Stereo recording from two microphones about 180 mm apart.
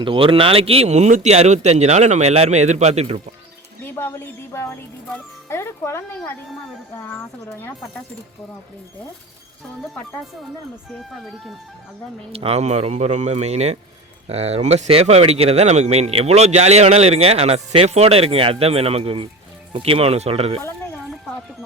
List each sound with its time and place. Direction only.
0.0 s speech: 30° right (ahead or behind)
3.9 s speech: 15° left (ahead or behind)
10.8 s speech: centre (ahead or behind)
12.3 s speech: 35° right (ahead or behind)
20.6 s a sound: 15° left (ahead or behind)